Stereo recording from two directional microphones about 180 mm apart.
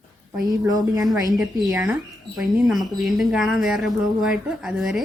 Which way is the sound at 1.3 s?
Centre (ahead or behind).